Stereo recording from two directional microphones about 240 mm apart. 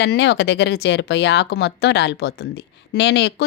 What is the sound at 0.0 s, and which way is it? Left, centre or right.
Speech, left.